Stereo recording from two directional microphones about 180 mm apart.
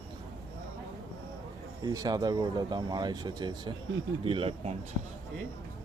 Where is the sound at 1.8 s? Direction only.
20° right (ahead or behind).